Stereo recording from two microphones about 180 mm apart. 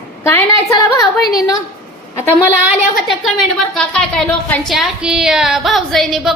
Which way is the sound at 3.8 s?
5° left (ahead or behind).